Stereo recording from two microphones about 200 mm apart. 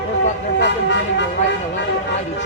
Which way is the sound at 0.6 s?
60° left (ahead or behind).